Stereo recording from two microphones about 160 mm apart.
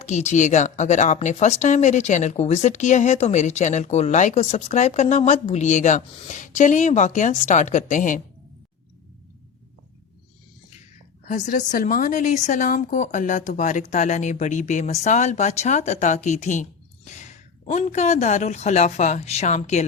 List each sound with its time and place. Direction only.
0.0 s speech: 45° left (ahead or behind)
11.3 s speech: 50° left (ahead or behind)
17.7 s speech: 45° left (ahead or behind)